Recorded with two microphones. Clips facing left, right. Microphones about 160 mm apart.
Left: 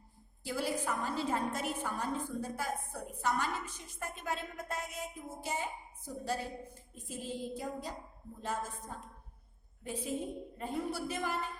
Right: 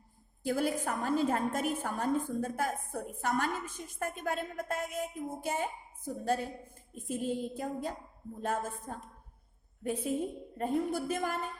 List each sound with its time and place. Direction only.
0.4 s a woman's voice: 50° right (ahead or behind)